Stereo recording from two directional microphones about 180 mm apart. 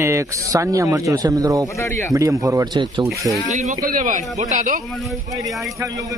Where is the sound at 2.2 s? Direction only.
20° right (ahead or behind).